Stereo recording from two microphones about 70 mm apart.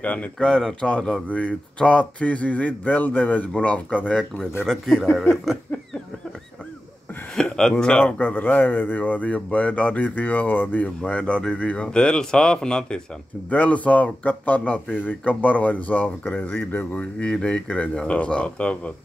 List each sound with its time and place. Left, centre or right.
0.0 s speech: left
0.5 s speech: centre
4.6 s speech: centre
7.3 s a sound: centre
8.0 s speech: left
11.0 s a man's voice: centre
13.5 s speech: left
17.2 s a man's voice: centre